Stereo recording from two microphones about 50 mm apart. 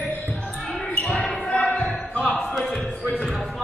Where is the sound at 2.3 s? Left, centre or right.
Left.